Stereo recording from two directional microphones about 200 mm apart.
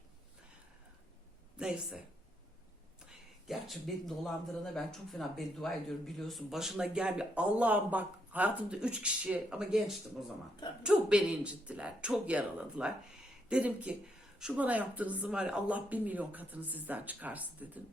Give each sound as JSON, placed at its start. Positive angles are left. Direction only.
{"t": 1.5, "sound": "speech", "side_deg": -5}
{"t": 3.1, "sound": "a woman's voice", "side_deg": 0}